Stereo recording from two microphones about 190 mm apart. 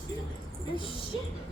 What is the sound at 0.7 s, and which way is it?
Music, 25° left (ahead or behind).